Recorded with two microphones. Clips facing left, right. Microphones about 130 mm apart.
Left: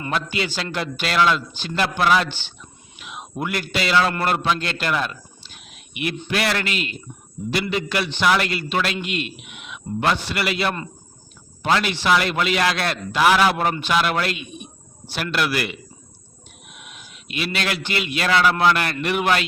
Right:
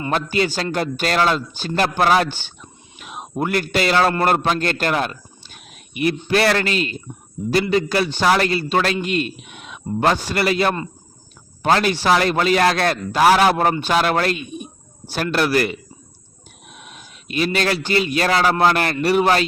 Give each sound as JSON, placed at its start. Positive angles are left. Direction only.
{"t": 0.1, "sound": "a man's voice", "side_deg": -40}